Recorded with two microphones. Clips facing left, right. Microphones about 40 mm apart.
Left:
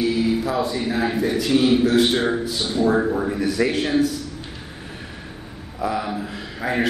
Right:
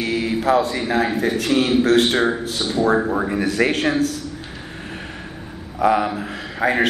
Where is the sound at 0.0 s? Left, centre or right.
Right.